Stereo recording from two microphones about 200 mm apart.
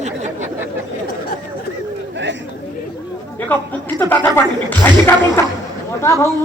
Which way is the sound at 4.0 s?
10° left (ahead or behind).